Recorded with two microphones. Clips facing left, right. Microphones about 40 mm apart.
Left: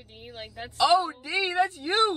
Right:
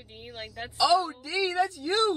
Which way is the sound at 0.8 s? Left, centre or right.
Left.